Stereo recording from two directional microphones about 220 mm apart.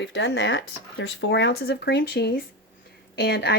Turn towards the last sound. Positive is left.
turn(degrees=50)  # may be behind; listen again after turning